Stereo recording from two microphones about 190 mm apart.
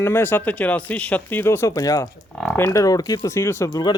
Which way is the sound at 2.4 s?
10° left (ahead or behind).